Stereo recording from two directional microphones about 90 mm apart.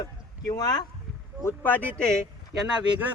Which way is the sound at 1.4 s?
25° left (ahead or behind).